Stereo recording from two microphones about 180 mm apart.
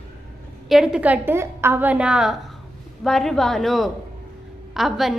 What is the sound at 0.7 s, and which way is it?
A woman's voice, 5° right (ahead or behind).